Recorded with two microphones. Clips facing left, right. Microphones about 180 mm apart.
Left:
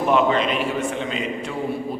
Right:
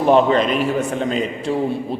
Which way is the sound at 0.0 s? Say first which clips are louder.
Right 4 dB; 35° right (ahead or behind).